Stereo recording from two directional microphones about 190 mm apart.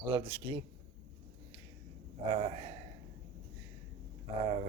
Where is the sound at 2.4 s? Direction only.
35° right (ahead or behind).